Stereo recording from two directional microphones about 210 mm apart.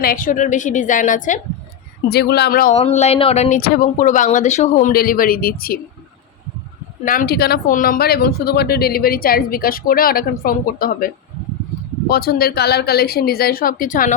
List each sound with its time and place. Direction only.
0.0 s speech: 40° left (ahead or behind)
2.0 s speech: 50° left (ahead or behind)
2.7 s speech: 30° left (ahead or behind)
3.6 s speech: 40° left (ahead or behind)
7.0 s speech: 40° left (ahead or behind)